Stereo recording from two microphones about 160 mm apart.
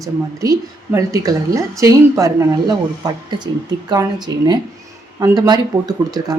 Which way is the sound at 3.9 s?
25° right (ahead or behind).